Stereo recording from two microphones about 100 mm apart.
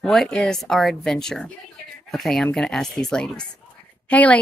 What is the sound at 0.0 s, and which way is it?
A woman's voice, 5° left (ahead or behind).